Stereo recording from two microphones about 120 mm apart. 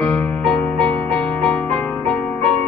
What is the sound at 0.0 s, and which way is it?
Music, 10° left (ahead or behind).